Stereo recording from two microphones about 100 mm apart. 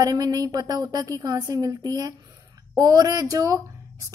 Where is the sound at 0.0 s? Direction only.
40° right (ahead or behind).